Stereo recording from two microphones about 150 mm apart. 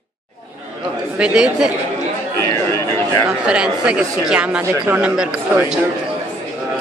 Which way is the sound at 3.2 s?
5° right (ahead or behind).